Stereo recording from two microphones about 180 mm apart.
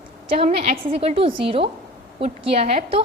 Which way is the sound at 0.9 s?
30° right (ahead or behind).